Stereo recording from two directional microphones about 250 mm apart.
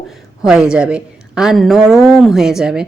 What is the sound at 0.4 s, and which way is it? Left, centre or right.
Speech, centre.